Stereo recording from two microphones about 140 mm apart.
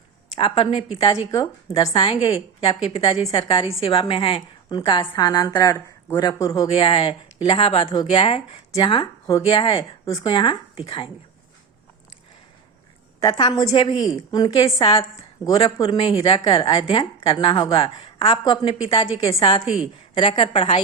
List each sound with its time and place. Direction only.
0.3 s a woman's voice: 40° left (ahead or behind)
6.7 s a woman's voice: 40° left (ahead or behind)
13.6 s a woman's voice: 35° left (ahead or behind)
19.6 s a woman's voice: 5° right (ahead or behind)
20.1 s a woman's voice: 40° left (ahead or behind)